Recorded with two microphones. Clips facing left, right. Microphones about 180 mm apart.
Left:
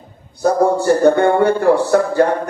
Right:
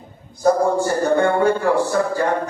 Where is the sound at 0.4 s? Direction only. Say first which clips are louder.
Left 3 dB; 65° left (ahead or behind).